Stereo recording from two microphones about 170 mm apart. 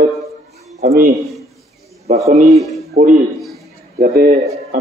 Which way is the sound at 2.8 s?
60° right (ahead or behind).